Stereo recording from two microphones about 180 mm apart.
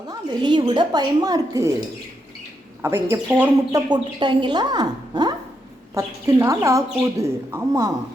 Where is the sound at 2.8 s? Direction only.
15° right (ahead or behind).